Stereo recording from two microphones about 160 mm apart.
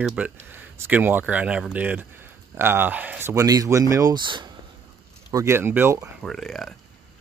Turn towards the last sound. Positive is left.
turn(degrees=0)  # may be behind; listen again after turning